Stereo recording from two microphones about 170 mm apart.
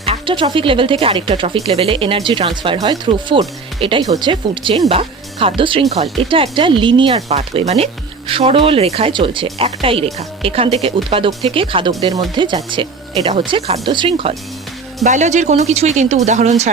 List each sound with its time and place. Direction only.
0.0 s speech: 30° right (ahead or behind)
15.0 s speech: 45° right (ahead or behind)